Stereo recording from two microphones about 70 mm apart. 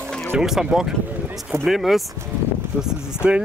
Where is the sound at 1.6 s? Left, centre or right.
Centre.